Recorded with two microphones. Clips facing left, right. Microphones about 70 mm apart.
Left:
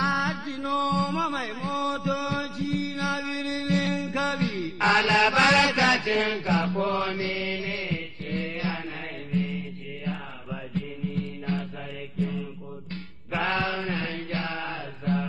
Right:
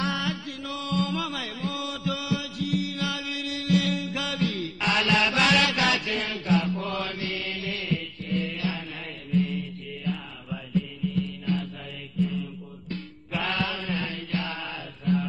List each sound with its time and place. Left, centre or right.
0.0 s mantra: left
9.3 s music: left
10.7 s music: left
12.2 s mantra: left
13.3 s mantra: left
14.3 s music: left